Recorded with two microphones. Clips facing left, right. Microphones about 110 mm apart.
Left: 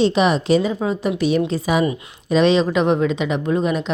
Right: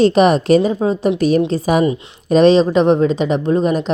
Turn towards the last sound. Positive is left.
turn(degrees=-40)  # may be behind; listen again after turning